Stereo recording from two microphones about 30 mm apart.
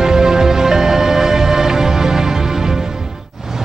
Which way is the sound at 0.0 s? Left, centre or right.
Centre.